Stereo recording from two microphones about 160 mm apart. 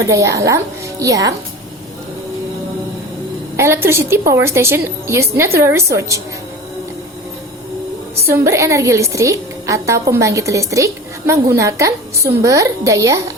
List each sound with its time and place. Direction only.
0.0 s a woman's voice: 20° right (ahead or behind)
3.6 s a woman's voice: 15° right (ahead or behind)
8.3 s a woman's voice: 20° right (ahead or behind)